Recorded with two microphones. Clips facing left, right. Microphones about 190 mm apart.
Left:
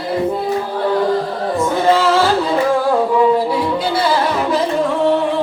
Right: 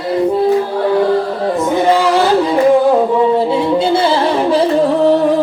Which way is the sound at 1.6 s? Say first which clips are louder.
Right 1 dB; 15° right (ahead or behind).